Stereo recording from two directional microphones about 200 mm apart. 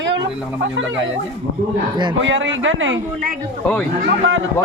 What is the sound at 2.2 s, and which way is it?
Speech, 70° right (ahead or behind).